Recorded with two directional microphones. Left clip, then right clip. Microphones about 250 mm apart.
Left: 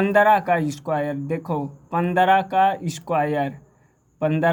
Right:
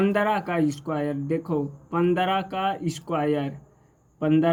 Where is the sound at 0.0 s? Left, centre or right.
Left.